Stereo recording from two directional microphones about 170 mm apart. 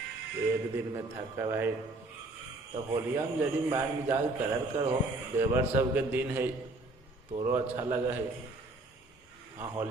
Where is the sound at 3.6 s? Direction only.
20° right (ahead or behind).